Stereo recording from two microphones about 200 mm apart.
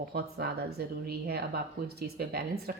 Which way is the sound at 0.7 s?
50° right (ahead or behind).